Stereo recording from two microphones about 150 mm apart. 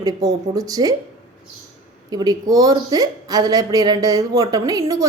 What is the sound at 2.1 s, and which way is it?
A woman's voice, 25° right (ahead or behind).